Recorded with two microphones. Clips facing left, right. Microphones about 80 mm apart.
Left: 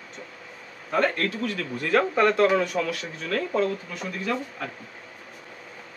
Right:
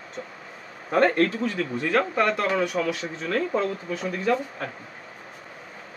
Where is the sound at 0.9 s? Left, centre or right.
Right.